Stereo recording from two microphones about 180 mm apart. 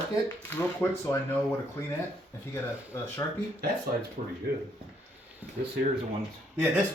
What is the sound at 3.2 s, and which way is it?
Speech, 20° left (ahead or behind).